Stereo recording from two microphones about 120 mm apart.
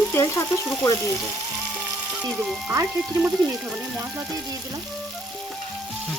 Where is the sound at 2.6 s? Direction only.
15° right (ahead or behind).